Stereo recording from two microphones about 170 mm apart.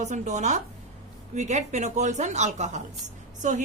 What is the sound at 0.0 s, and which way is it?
A woman's voice, 45° right (ahead or behind).